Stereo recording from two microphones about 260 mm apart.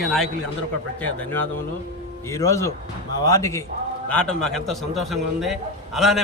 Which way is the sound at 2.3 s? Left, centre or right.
Centre.